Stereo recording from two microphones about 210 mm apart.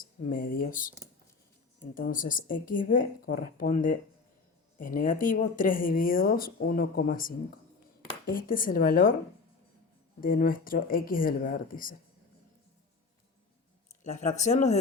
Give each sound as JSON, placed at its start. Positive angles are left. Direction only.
{"t": 0.0, "sound": "speech", "side_deg": 40}
{"t": 2.0, "sound": "a woman's voice", "side_deg": 40}
{"t": 10.2, "sound": "speech", "side_deg": 40}
{"t": 14.0, "sound": "a woman's voice", "side_deg": 35}